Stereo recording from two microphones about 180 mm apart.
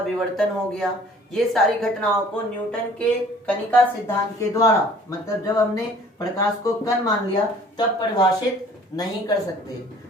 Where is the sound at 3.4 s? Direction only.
10° left (ahead or behind).